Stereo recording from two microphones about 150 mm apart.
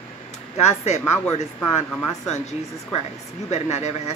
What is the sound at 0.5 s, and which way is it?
Speech, 45° left (ahead or behind).